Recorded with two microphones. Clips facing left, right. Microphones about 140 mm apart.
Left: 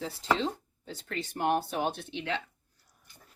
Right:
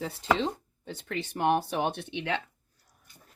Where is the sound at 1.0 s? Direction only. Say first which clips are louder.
Right 3 dB; 70° right (ahead or behind).